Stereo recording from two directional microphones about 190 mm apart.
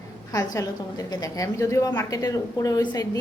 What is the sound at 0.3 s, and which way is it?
A woman's voice, 15° left (ahead or behind).